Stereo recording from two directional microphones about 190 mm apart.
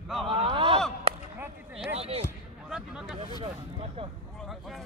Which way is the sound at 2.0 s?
30° right (ahead or behind).